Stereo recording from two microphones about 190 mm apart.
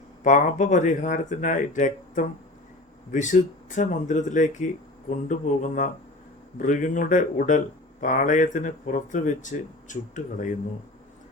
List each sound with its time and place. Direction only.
0.3 s speech: 40° left (ahead or behind)